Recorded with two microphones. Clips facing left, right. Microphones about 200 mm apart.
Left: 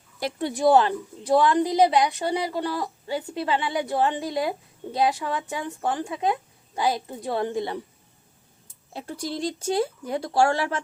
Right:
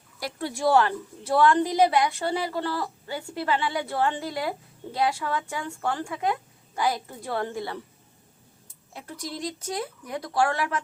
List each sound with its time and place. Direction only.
0.2 s a woman's voice: 20° left (ahead or behind)
8.9 s a woman's voice: 30° left (ahead or behind)